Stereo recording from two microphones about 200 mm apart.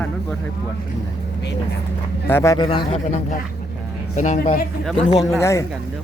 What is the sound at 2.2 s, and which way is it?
Speech, 15° left (ahead or behind).